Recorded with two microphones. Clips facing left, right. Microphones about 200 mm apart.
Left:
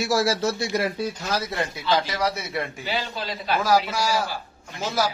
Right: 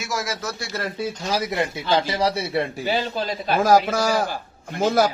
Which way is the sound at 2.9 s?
45° right (ahead or behind).